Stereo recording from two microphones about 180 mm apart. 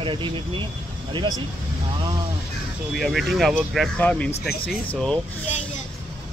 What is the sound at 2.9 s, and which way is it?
Speech, centre (ahead or behind).